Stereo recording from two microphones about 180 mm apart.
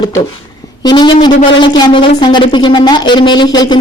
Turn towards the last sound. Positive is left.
turn(degrees=25)  # may be behind; listen again after turning